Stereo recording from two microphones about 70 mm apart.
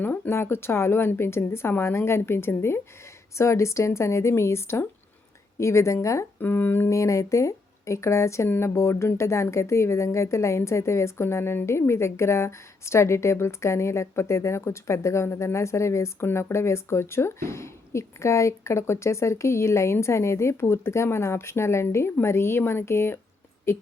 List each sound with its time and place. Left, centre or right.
0.0 s speech: left
6.4 s speech: left
6.9 s speech: left